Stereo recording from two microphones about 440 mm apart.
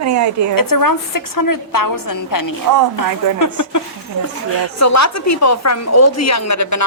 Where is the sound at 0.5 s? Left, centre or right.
Left.